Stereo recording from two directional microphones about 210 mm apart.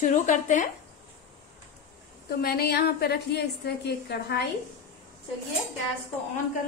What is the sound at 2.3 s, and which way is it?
A woman's voice, 50° left (ahead or behind).